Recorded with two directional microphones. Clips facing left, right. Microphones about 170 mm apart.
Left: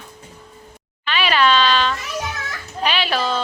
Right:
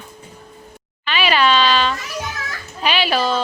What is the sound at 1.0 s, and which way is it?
A woman's voice, 5° right (ahead or behind).